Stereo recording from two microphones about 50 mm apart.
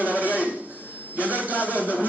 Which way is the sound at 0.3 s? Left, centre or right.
Right.